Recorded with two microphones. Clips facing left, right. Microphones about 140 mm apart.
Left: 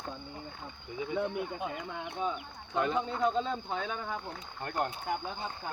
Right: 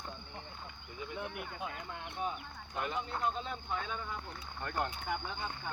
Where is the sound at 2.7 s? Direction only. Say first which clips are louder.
Left 7 dB; 90° left.